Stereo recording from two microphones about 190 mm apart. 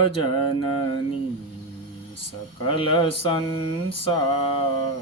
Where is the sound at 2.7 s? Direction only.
25° left (ahead or behind).